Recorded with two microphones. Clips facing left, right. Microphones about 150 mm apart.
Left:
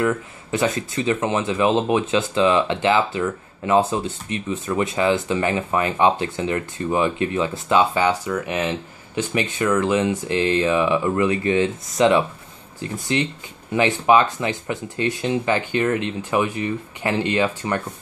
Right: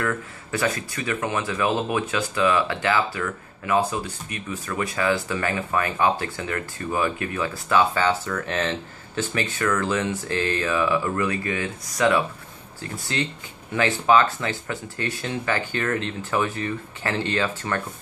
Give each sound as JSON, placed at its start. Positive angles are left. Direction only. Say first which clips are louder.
{"t": 0.0, "sound": "speech", "louder": "left 5 dB", "side_deg": 20}